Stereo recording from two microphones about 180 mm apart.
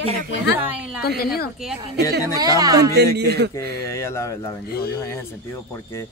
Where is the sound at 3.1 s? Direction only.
65° right (ahead or behind).